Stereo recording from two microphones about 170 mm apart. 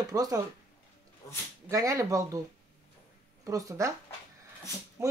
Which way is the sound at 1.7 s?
20° right (ahead or behind).